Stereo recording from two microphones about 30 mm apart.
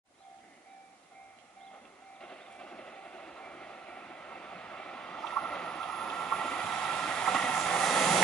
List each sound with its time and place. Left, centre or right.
2.1 s train: left
5.3 s vehicle: left
7.1 s train: left
7.8 s vehicle: centre